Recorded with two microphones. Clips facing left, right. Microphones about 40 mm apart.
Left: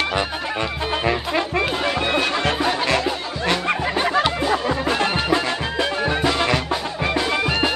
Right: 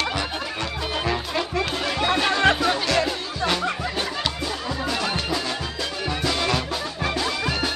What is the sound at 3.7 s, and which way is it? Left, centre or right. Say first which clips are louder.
Music: left 6 dB; left.